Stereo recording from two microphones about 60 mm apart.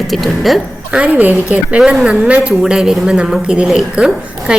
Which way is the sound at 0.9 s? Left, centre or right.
Right.